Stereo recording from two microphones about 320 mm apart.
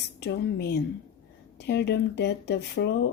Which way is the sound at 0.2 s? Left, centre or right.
Left.